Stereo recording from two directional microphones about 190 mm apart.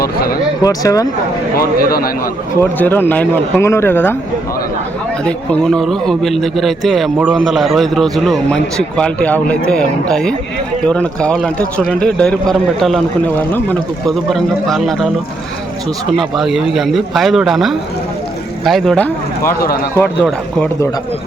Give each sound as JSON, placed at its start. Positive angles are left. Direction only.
{"t": 0.0, "sound": "speech", "side_deg": 50}
{"t": 0.6, "sound": "speech", "side_deg": 20}
{"t": 1.5, "sound": "speech", "side_deg": 50}
{"t": 2.6, "sound": "speech", "side_deg": 10}
{"t": 5.2, "sound": "speech", "side_deg": 5}
{"t": 16.1, "sound": "speech", "side_deg": 0}
{"t": 19.5, "sound": "speech", "side_deg": 50}